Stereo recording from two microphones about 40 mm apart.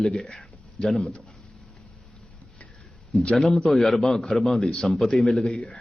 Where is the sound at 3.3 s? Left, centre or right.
Centre.